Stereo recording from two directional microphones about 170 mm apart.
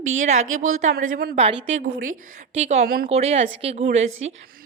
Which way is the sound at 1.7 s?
45° right (ahead or behind).